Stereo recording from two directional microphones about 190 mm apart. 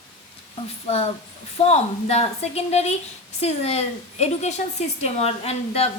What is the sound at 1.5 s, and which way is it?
A woman's voice, 35° left (ahead or behind).